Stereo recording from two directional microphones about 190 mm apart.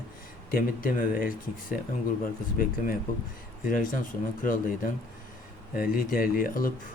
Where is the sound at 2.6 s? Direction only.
50° left (ahead or behind).